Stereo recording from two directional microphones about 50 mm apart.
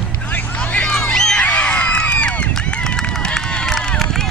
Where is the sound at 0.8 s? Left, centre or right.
Centre.